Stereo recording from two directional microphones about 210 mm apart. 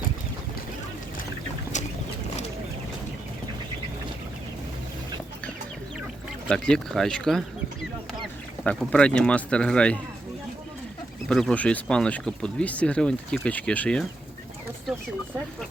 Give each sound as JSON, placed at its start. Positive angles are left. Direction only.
{"t": 1.7, "sound": "boat", "side_deg": 35}
{"t": 6.5, "sound": "speech", "side_deg": 5}
{"t": 8.6, "sound": "speech", "side_deg": 5}
{"t": 11.3, "sound": "speech", "side_deg": 0}